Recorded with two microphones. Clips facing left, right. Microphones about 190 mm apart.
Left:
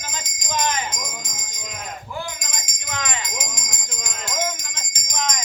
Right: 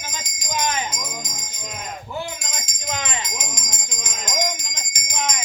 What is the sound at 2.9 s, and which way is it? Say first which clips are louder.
Music: right 1 dB; 25° right (ahead or behind).